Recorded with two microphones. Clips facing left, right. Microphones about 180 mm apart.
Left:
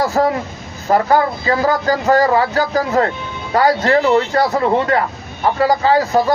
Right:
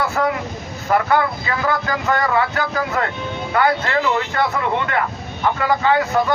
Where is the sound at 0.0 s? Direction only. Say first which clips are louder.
Left 4 dB; 35° left (ahead or behind).